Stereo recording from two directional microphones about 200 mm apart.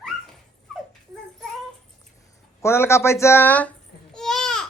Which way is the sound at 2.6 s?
10° left (ahead or behind).